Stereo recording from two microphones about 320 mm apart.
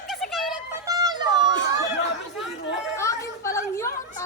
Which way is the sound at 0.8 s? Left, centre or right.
Centre.